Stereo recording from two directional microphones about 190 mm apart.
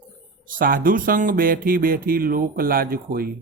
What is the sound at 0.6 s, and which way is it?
Speech, 50° right (ahead or behind).